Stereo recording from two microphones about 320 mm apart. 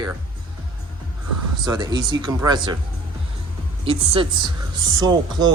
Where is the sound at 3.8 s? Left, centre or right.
Centre.